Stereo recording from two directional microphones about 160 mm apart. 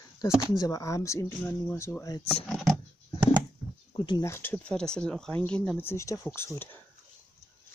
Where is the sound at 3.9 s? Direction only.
30° left (ahead or behind).